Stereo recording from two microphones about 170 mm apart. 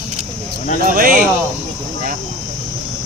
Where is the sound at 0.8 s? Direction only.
55° right (ahead or behind).